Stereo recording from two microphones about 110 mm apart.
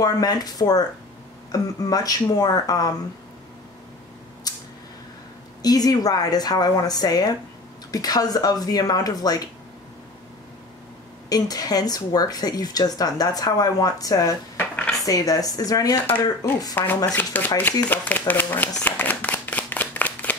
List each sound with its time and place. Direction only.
0.0 s speech: 35° left (ahead or behind)
4.5 s a sound: 35° left (ahead or behind)
5.6 s speech: 35° left (ahead or behind)
11.2 s speech: 35° left (ahead or behind)
14.6 s dishes: 10° left (ahead or behind)
15.0 s speech: 30° left (ahead or behind)
16.7 s speech: 15° left (ahead or behind)